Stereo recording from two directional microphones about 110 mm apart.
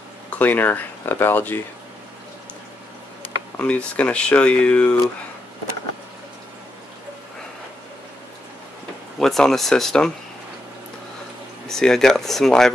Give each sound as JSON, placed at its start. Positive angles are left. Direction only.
{"t": 0.3, "sound": "speech", "side_deg": 15}
{"t": 3.5, "sound": "speech", "side_deg": 15}
{"t": 9.2, "sound": "speech", "side_deg": 5}
{"t": 11.6, "sound": "speech", "side_deg": 5}